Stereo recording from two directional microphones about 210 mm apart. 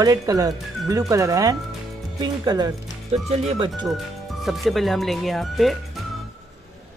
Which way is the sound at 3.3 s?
30° right (ahead or behind).